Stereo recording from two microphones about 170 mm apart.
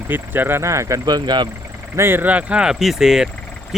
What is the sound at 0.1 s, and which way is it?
Speech, 10° right (ahead or behind).